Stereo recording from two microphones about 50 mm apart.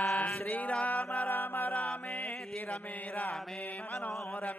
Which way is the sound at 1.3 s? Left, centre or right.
Left.